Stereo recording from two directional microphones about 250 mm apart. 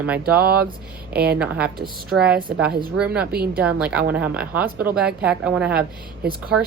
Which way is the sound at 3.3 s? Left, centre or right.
Right.